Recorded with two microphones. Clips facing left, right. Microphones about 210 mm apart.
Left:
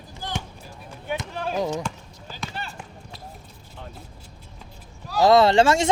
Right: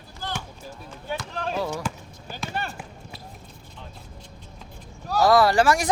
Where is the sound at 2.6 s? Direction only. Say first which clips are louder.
Right 6 dB; 55° right (ahead or behind).